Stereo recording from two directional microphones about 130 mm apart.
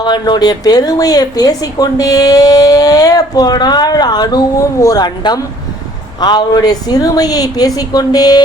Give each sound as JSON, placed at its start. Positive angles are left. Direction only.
{"t": 0.0, "sound": "a woman's voice", "side_deg": 35}